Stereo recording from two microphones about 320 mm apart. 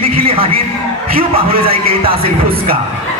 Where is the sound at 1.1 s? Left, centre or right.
Centre.